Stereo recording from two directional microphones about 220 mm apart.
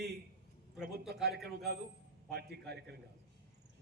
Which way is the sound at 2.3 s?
45° right (ahead or behind).